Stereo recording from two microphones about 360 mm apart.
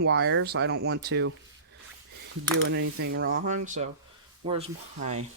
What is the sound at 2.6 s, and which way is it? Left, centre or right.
Speech, right.